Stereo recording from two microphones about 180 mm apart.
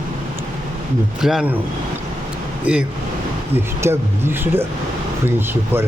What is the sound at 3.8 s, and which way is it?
Speech, 15° right (ahead or behind).